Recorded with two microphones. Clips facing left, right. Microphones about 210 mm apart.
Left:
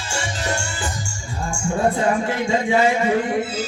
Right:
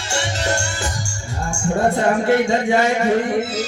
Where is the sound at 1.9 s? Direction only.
70° right (ahead or behind).